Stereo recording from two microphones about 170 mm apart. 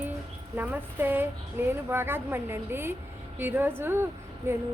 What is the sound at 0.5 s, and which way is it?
A woman's voice, 10° right (ahead or behind).